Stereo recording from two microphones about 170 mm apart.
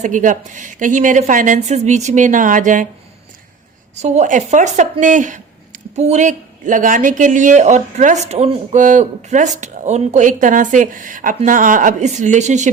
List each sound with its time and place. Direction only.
0.0 s speech: 50° right (ahead or behind)
3.9 s speech: 40° right (ahead or behind)